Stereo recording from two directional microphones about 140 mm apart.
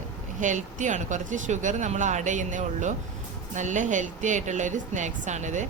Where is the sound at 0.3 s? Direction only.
65° right (ahead or behind).